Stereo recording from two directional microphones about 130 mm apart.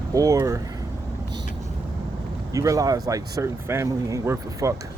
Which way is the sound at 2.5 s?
25° right (ahead or behind).